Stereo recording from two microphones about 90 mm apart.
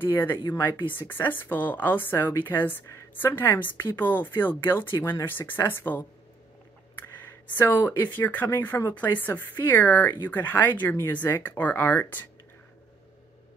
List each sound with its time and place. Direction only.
0.1 s speech: 25° left (ahead or behind)
7.2 s speech: 20° left (ahead or behind)